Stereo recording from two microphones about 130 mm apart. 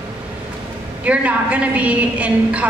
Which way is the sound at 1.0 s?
10° right (ahead or behind).